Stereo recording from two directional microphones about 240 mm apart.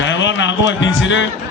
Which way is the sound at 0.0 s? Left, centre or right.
Left.